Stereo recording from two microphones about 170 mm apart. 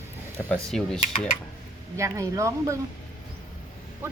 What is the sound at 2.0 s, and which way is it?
Speech, 20° right (ahead or behind).